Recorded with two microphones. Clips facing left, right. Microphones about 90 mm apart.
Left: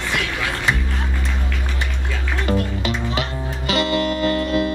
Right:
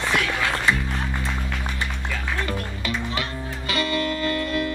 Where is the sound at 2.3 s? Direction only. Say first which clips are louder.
Left 6 dB; 20° left (ahead or behind).